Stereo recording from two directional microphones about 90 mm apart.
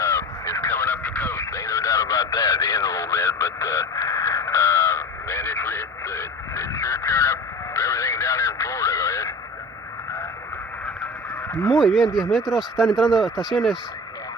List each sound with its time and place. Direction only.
0.0 s honk: 30° left (ahead or behind)
0.6 s radio: 20° left (ahead or behind)
11.4 s a sound: 30° left (ahead or behind)
11.7 s speech: centre (ahead or behind)